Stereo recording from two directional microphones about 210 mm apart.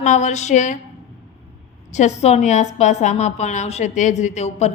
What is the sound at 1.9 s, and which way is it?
A woman's voice, 35° left (ahead or behind).